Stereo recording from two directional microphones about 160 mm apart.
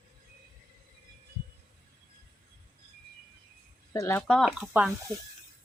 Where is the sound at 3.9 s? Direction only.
20° left (ahead or behind).